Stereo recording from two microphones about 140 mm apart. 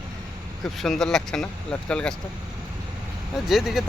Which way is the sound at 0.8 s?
5° left (ahead or behind).